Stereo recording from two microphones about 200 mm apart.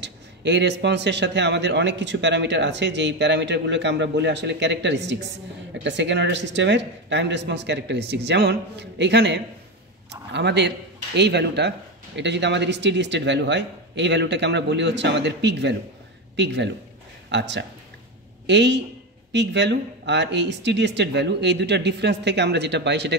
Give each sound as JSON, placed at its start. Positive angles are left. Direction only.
{"t": 0.0, "sound": "a man's voice", "side_deg": -60}